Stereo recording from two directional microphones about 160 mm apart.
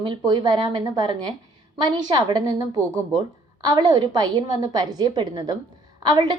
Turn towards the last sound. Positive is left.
turn(degrees=-25)  # may be behind; listen again after turning